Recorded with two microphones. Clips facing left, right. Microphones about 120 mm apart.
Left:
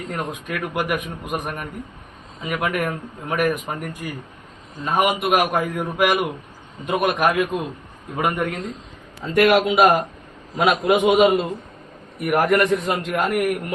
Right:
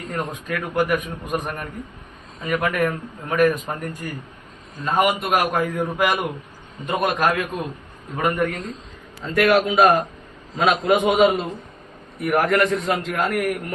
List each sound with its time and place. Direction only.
0.1 s a man's voice: 15° left (ahead or behind)